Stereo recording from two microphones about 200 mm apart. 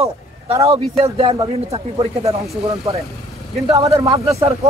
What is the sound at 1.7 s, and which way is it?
Speech, 30° right (ahead or behind).